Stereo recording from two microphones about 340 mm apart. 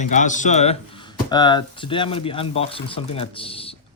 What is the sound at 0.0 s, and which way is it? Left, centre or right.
Speech, left.